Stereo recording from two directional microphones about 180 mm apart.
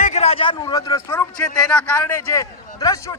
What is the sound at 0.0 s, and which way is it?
Speech, 35° left (ahead or behind).